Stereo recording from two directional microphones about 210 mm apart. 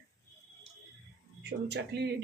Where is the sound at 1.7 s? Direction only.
55° right (ahead or behind).